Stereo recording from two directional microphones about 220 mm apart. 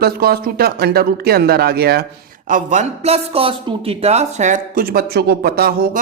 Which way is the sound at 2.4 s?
35° right (ahead or behind).